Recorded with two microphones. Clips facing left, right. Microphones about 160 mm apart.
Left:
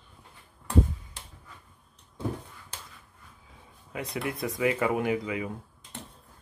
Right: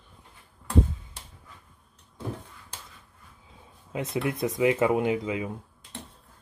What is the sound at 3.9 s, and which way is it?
Speech, 20° right (ahead or behind).